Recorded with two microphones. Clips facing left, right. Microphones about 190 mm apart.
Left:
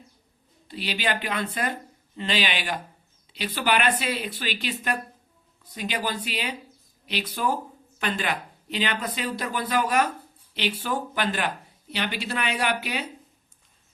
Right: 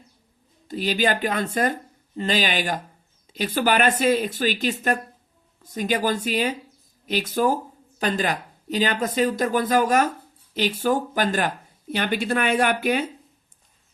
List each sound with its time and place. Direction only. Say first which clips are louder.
0.7 s speech: right 6 dB; 45° right (ahead or behind)